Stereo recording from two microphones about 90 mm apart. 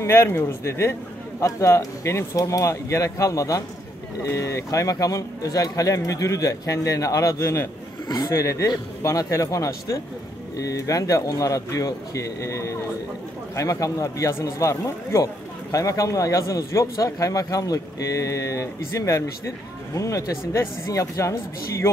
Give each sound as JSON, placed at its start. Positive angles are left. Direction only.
{"t": 0.0, "sound": "a man's voice", "side_deg": 30}
{"t": 8.1, "sound": "a man's voice", "side_deg": 45}